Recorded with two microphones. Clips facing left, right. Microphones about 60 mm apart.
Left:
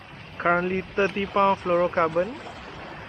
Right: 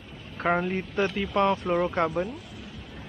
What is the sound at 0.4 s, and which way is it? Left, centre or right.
Speech, centre.